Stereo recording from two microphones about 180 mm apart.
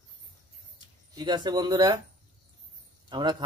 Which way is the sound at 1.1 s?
25° right (ahead or behind).